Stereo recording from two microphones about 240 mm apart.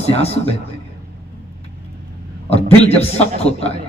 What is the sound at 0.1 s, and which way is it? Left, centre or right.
Speech, left.